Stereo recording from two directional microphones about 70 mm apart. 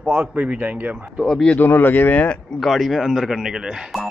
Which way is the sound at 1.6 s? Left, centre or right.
Left.